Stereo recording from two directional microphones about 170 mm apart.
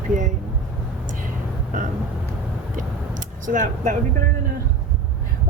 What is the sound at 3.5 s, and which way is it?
Speech, 50° right (ahead or behind).